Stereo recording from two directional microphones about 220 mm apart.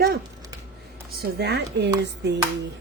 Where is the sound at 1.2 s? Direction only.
45° right (ahead or behind).